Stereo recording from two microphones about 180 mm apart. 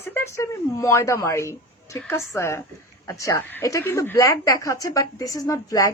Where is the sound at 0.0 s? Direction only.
15° left (ahead or behind).